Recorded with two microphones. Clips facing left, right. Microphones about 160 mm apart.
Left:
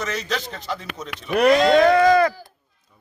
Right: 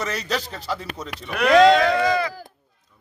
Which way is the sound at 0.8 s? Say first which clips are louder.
Right 1 dB; 35° right (ahead or behind).